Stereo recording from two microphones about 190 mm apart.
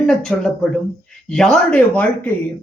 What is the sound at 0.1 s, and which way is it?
Speech, 5° left (ahead or behind).